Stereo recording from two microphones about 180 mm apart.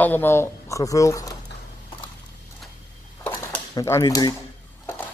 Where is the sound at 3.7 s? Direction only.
15° left (ahead or behind).